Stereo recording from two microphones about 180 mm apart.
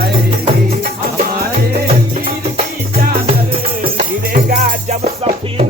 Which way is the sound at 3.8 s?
50° right (ahead or behind).